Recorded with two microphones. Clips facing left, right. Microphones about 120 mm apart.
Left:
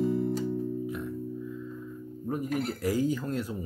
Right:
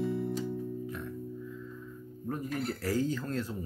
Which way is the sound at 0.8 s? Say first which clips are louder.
Left 5 dB; 10° left (ahead or behind).